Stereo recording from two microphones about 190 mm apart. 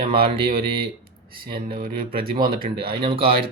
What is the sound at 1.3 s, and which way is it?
Speech, 50° right (ahead or behind).